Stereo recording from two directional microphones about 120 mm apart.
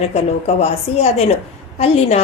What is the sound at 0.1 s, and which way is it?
A woman's voice, 60° left (ahead or behind).